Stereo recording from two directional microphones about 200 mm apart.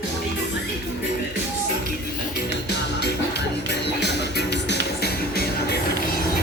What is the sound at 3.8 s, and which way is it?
Music, 55° left (ahead or behind).